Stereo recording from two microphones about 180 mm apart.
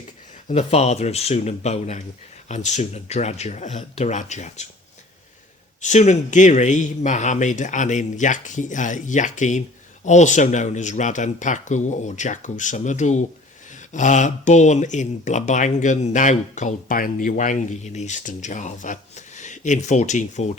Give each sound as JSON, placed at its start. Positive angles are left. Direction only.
{"t": 0.4, "sound": "speech", "side_deg": 35}
{"t": 5.8, "sound": "speech", "side_deg": 40}